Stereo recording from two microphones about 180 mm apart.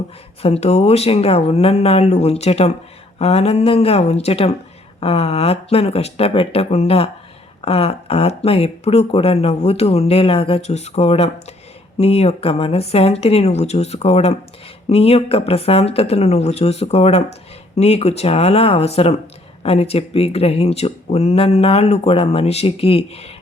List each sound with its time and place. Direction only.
0.4 s speech: 35° left (ahead or behind)